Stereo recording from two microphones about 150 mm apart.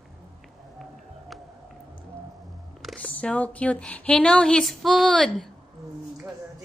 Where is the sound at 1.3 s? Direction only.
Centre (ahead or behind).